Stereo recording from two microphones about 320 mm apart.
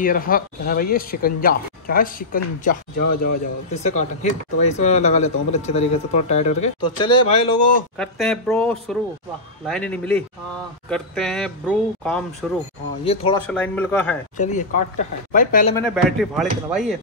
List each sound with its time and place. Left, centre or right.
0.0 s speech: left
8.0 s speech: centre
13.0 s speech: centre
13.5 s speech: centre
14.3 s speech: left
15.7 s speech: centre